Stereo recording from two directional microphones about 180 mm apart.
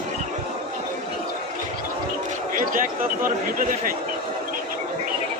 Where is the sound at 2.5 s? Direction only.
50° right (ahead or behind).